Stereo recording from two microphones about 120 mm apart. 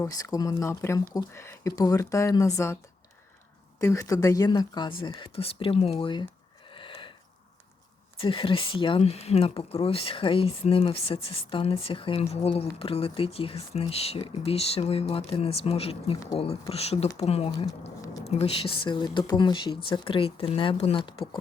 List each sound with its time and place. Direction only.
0.0 s speech: 30° left (ahead or behind)
3.8 s speech: 25° left (ahead or behind); by 6.2 s 45° left (ahead or behind)
6.7 s a sound: 45° left (ahead or behind)
8.2 s speech: 45° left (ahead or behind)
12.2 s speech: 60° left (ahead or behind)